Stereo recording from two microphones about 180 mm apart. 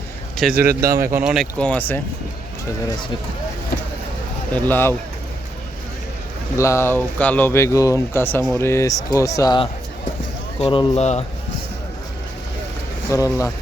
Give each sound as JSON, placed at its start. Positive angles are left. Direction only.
{"t": 0.3, "sound": "a man's voice", "side_deg": 0}
{"t": 0.7, "sound": "a man's voice", "side_deg": -55}
{"t": 1.2, "sound": "speech", "side_deg": 0}
{"t": 4.7, "sound": "speech", "side_deg": 15}
{"t": 6.6, "sound": "speech", "side_deg": 15}
{"t": 13.1, "sound": "speech", "side_deg": 15}